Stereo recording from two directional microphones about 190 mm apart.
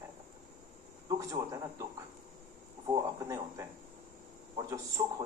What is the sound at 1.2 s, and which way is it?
Speech, 20° right (ahead or behind).